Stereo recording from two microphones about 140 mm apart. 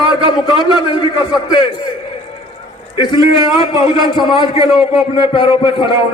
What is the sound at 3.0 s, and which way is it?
A man's voice, 35° left (ahead or behind).